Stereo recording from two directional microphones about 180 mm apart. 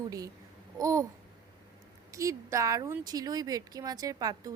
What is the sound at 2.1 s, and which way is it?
Speech, 15° right (ahead or behind).